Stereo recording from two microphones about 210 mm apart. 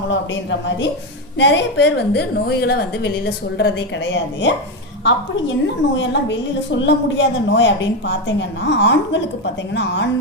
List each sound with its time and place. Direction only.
0.1 s a woman's voice: 60° left (ahead or behind)